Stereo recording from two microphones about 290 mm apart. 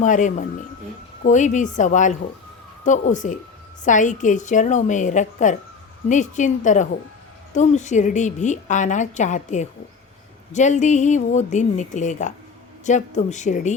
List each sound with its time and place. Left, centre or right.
0.0 s a woman's voice: left